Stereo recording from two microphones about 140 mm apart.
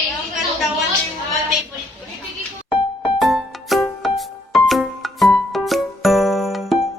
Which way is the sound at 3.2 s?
Centre (ahead or behind).